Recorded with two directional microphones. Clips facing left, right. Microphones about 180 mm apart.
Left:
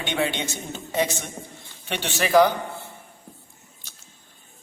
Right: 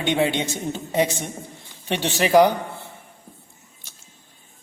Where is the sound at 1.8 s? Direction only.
20° right (ahead or behind).